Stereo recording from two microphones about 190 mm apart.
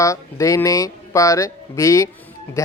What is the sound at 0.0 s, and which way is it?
Speech, 15° left (ahead or behind).